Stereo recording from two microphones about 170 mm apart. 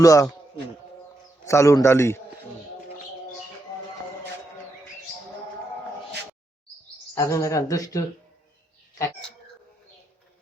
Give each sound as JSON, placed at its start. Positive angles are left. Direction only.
{"t": 0.0, "sound": "a man's voice", "side_deg": 20}
{"t": 7.2, "sound": "speech", "side_deg": 20}